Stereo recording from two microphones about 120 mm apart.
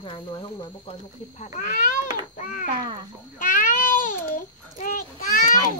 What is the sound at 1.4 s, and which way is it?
Speech, 90° left.